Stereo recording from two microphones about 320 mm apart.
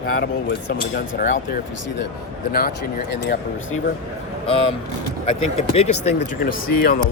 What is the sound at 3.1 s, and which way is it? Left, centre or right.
Speech, left.